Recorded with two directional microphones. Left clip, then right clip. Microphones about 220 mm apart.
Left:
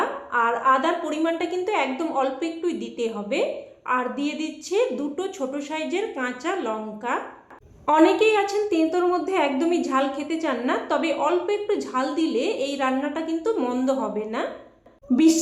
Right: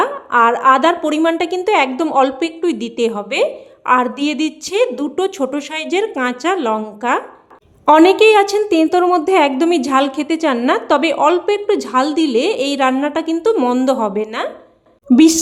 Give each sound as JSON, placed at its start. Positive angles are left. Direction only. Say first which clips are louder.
{"t": 0.0, "sound": "a woman's voice", "louder": "right 10 dB", "side_deg": -50}